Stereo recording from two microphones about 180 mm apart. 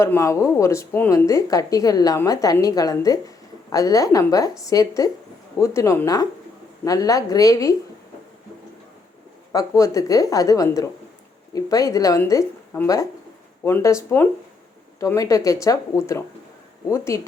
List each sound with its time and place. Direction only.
0.0 s a woman's voice: 15° left (ahead or behind)
9.5 s a woman's voice: 20° left (ahead or behind)